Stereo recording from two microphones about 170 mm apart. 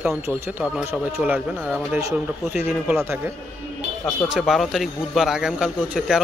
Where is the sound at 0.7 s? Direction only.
10° right (ahead or behind).